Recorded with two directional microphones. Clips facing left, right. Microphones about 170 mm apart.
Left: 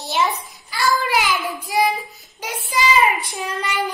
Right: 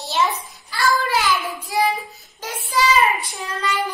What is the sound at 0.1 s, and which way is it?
Child singing, 10° left (ahead or behind).